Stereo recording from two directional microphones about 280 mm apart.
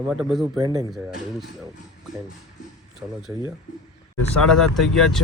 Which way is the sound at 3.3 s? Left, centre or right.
Centre.